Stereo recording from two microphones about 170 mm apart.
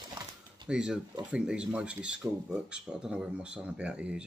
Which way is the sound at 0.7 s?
5° right (ahead or behind).